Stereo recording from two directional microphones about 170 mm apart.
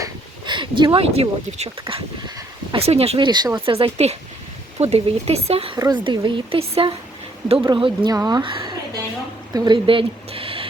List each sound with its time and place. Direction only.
0.0 s a sound: 25° right (ahead or behind)
0.8 s speech: 30° right (ahead or behind)
1.8 s speech: 25° right (ahead or behind)
2.7 s a woman's voice: 35° right (ahead or behind)